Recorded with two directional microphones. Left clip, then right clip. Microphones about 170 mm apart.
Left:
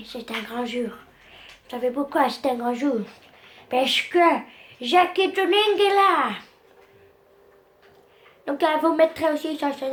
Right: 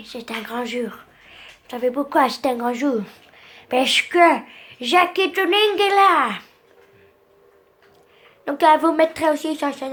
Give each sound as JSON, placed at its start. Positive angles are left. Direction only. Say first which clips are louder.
{"t": 0.0, "sound": "speech", "louder": "right 2 dB", "side_deg": -30}
{"t": 8.4, "sound": "a woman's voice", "louder": "right 6 dB", "side_deg": -35}